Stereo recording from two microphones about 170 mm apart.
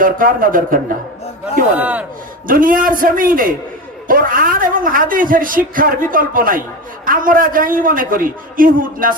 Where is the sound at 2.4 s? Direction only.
55° right (ahead or behind).